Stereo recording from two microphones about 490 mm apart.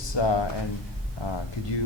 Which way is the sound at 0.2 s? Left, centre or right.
Left.